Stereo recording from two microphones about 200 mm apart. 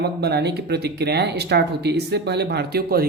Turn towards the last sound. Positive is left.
turn(degrees=-50)  # may be behind; listen again after turning